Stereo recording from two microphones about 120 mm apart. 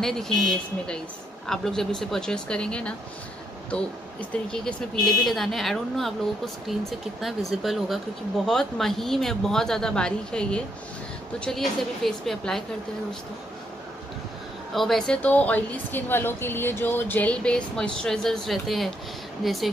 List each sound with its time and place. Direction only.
0.0 s speech: 5° left (ahead or behind)
4.3 s speech: 10° left (ahead or behind)
14.7 s a woman's voice: centre (ahead or behind)